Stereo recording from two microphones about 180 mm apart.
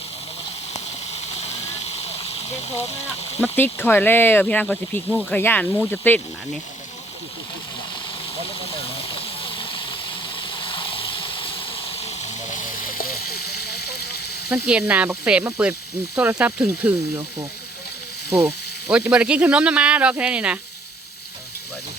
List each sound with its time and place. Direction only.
1.4 s vehicle: 35° left (ahead or behind)
3.4 s speech: 10° left (ahead or behind)
9.1 s a sound: 30° left (ahead or behind)
12.5 s frying: 45° left (ahead or behind); by 14.2 s 60° left (ahead or behind)
14.5 s speech: 5° right (ahead or behind)
18.3 s speech: 10° right (ahead or behind)